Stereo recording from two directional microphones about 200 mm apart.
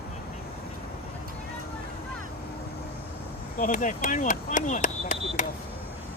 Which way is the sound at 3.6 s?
40° left (ahead or behind).